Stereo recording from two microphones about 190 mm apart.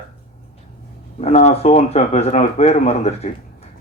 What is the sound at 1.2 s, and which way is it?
A man's voice, 35° left (ahead or behind).